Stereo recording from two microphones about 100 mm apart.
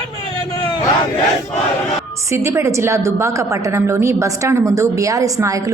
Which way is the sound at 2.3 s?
30° right (ahead or behind).